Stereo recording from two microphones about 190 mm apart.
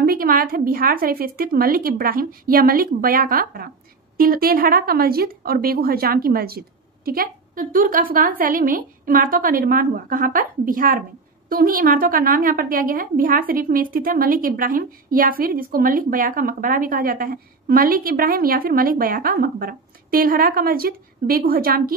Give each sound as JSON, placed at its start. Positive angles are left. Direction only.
{"t": 0.0, "sound": "a woman's voice", "side_deg": -50}